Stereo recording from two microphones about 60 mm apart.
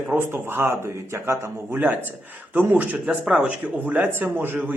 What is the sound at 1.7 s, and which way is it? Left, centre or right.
Speech, right.